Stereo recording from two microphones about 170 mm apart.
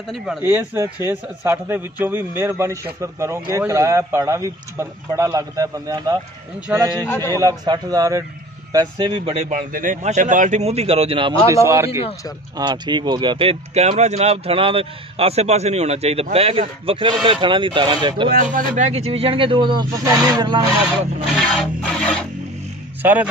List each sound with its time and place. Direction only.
0.4 s a man's voice: 15° right (ahead or behind)
7.1 s a man's voice: 15° left (ahead or behind)
7.3 s speech: 20° right (ahead or behind)
9.4 s speech: 50° right (ahead or behind); by 11.3 s 30° right (ahead or behind)
11.4 s a man's voice: 20° right (ahead or behind)
18.3 s speech: 50° right (ahead or behind); by 20.6 s 25° right (ahead or behind)
21.4 s music: 5° left (ahead or behind)
23.0 s a man's voice: 10° right (ahead or behind)